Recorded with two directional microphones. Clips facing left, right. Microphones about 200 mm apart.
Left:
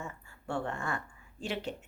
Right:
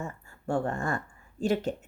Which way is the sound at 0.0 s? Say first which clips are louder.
Right 6 dB; 45° right (ahead or behind).